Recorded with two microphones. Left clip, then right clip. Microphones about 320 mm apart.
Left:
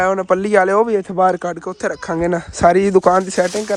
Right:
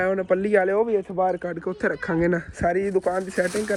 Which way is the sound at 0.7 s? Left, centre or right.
Left.